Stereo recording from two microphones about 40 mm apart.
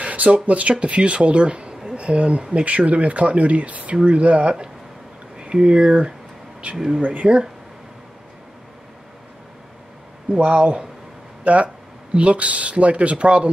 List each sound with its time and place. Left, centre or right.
0.0 s speech: right
10.4 s speech: right